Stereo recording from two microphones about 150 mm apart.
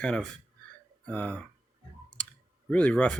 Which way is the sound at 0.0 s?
5° left (ahead or behind).